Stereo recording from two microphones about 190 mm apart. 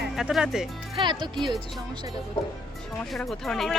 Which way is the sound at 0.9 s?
25° right (ahead or behind).